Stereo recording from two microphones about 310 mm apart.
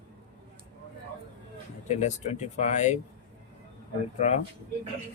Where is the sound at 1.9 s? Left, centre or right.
Left.